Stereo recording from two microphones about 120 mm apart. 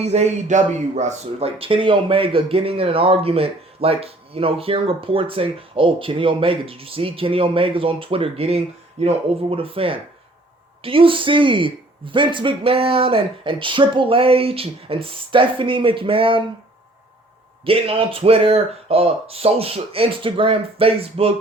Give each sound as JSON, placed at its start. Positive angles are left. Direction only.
{"t": 0.0, "sound": "speech", "side_deg": -65}
{"t": 1.5, "sound": "speech", "side_deg": -50}
{"t": 17.7, "sound": "speech", "side_deg": -50}